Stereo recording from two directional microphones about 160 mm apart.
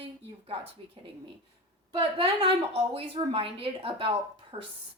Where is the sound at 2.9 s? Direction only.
35° right (ahead or behind).